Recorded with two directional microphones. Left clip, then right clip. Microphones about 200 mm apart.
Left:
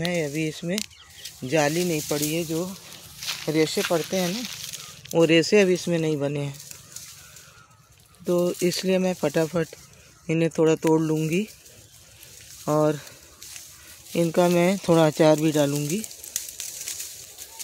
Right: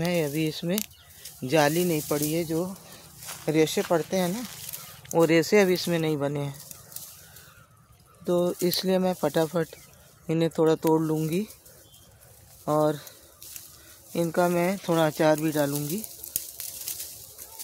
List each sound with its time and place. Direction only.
0.0 s speech: centre (ahead or behind); by 6.5 s 15° left (ahead or behind)
8.3 s speech: 10° left (ahead or behind)
12.6 s speech: 20° left (ahead or behind)
14.1 s speech: 25° left (ahead or behind)
16.3 s a sound: 20° right (ahead or behind)